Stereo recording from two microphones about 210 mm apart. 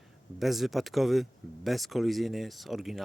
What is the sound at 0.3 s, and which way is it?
Speech, centre (ahead or behind).